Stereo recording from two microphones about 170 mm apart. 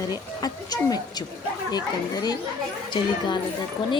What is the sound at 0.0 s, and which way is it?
Speech, 20° left (ahead or behind).